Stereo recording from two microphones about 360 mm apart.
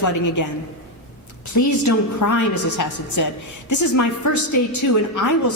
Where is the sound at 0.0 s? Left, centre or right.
Left.